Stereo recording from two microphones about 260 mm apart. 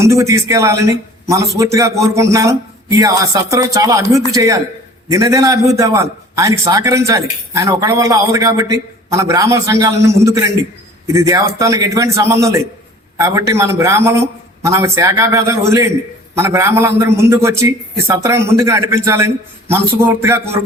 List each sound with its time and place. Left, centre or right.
0.0 s a man's voice: centre